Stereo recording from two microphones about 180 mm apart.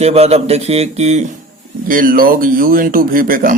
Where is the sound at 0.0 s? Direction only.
35° right (ahead or behind).